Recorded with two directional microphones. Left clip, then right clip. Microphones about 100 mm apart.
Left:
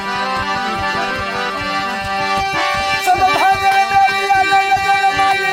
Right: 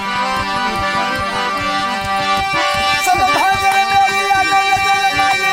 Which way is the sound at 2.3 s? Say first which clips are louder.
Right 1 dB; 35° right (ahead or behind).